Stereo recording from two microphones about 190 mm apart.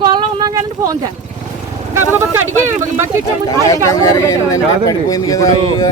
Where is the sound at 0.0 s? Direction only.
25° right (ahead or behind).